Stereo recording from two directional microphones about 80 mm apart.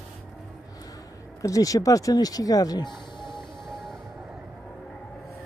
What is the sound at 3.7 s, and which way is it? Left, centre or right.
Music, centre.